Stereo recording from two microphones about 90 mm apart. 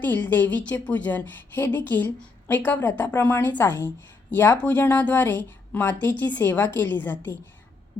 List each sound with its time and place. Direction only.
0.0 s a woman's voice: 20° left (ahead or behind)